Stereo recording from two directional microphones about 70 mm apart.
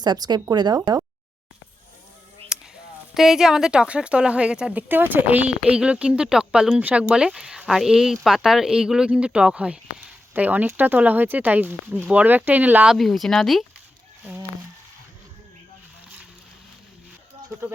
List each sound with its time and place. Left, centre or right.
0.0 s speech: right
2.5 s a sound: centre
3.2 s speech: centre
4.8 s speech: right
12.9 s speech: centre